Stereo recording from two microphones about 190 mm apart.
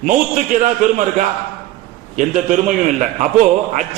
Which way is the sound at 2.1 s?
40° right (ahead or behind).